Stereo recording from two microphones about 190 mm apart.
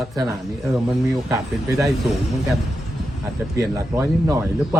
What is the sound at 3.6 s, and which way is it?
Speech, 15° right (ahead or behind).